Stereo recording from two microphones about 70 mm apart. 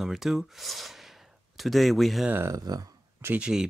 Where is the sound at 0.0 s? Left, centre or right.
Centre.